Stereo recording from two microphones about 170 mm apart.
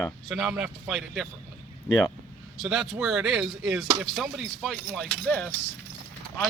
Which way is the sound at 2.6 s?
Centre (ahead or behind).